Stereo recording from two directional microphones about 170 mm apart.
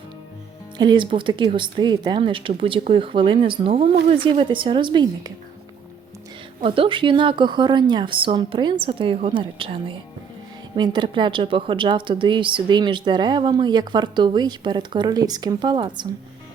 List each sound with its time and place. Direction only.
0.8 s a woman's voice: 25° right (ahead or behind)
6.6 s a woman's voice: 30° right (ahead or behind)